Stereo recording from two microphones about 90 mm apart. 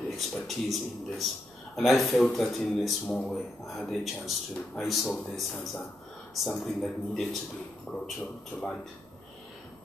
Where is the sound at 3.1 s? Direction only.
15° left (ahead or behind).